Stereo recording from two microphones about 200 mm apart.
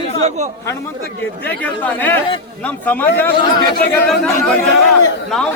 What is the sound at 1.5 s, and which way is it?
Speech, 10° left (ahead or behind).